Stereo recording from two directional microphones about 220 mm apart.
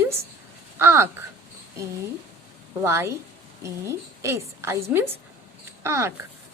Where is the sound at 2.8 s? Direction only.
10° right (ahead or behind).